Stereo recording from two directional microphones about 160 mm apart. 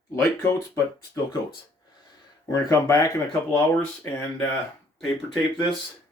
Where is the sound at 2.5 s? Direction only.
20° left (ahead or behind).